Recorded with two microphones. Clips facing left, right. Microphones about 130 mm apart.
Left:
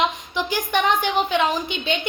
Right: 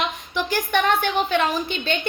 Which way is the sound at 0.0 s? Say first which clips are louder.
Left 3 dB; 15° left (ahead or behind).